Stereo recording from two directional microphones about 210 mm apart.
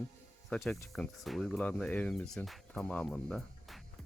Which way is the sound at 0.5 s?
5° left (ahead or behind).